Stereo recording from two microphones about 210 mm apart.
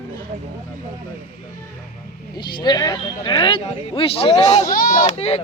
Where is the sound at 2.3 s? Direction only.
20° left (ahead or behind).